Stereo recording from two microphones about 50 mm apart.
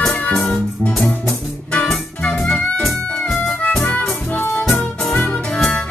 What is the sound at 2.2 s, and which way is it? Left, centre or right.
Music, left.